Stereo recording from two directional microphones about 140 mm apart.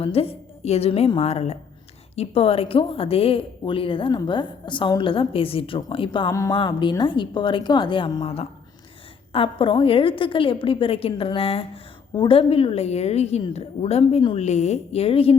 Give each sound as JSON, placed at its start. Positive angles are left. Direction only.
{"t": 0.0, "sound": "a woman's voice", "side_deg": 45}